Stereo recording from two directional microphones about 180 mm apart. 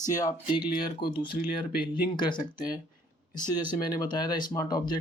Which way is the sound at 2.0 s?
25° left (ahead or behind).